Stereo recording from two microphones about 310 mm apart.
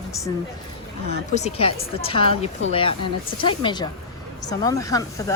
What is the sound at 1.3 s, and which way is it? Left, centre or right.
A woman's voice, centre.